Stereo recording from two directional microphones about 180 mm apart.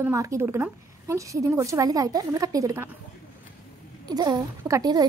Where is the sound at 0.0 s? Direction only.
15° right (ahead or behind).